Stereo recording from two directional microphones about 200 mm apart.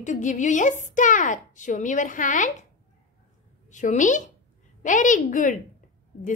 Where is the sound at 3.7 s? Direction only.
40° left (ahead or behind).